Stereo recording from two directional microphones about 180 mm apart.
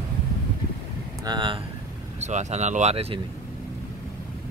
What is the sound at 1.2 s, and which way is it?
Speech, 25° right (ahead or behind).